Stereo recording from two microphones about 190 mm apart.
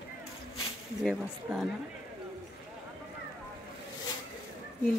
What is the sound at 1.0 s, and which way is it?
Speech, centre (ahead or behind).